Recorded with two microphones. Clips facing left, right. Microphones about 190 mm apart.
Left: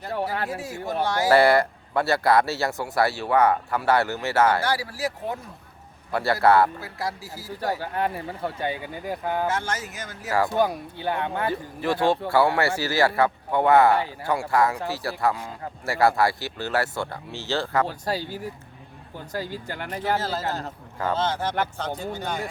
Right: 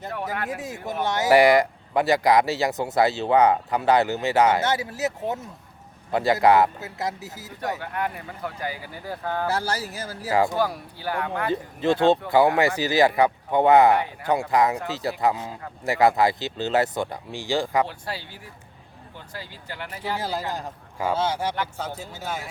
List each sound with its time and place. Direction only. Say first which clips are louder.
0.5 s speech: left 1 dB; 20° right (ahead or behind)
7.8 s speech: left 2 dB; 30° left (ahead or behind); by 9.5 s 15° left (ahead or behind)
9.5 s speech: right 2 dB; 35° right (ahead or behind)
10.3 s speech: right 2 dB; 20° right (ahead or behind)
10.6 s speech: left 2 dB; 20° left (ahead or behind)
11.5 s speech: right 3 dB; 20° right (ahead or behind)
17.8 s speech: left 6 dB; 40° left (ahead or behind)
20.1 s speech: left 1 dB; 15° right (ahead or behind)